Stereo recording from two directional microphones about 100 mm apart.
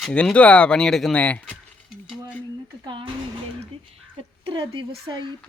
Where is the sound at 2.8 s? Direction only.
55° right (ahead or behind).